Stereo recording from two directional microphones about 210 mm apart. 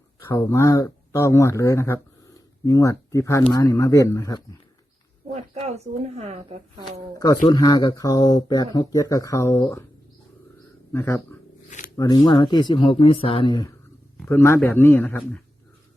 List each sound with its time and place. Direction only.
0.2 s speech: 15° left (ahead or behind)
5.3 s a woman's voice: 30° right (ahead or behind)
7.4 s speech: 20° left (ahead or behind)
10.9 s speech: 10° left (ahead or behind)
14.2 s a man's voice: 10° left (ahead or behind)